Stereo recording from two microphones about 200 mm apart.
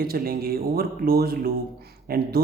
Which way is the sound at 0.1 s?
50° right (ahead or behind).